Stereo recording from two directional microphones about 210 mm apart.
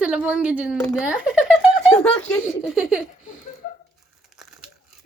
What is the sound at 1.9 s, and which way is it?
Speech, 5° left (ahead or behind).